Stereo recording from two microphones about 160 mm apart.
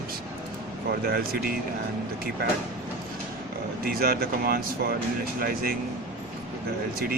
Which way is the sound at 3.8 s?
70° right (ahead or behind).